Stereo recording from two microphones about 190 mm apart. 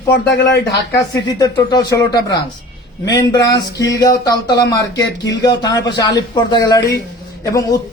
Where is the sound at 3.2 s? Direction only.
20° left (ahead or behind).